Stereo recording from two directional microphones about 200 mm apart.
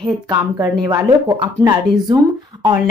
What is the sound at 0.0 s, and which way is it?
Speech, 20° right (ahead or behind).